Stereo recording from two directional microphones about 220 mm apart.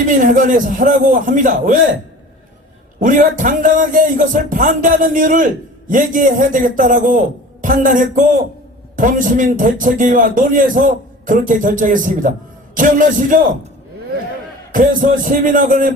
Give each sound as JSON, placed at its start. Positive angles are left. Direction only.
{"t": 0.2, "sound": "speech", "side_deg": -35}
{"t": 3.0, "sound": "speech", "side_deg": -35}
{"t": 14.7, "sound": "speech", "side_deg": -35}